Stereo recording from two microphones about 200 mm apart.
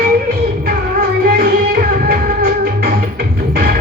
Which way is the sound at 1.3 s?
45° right (ahead or behind).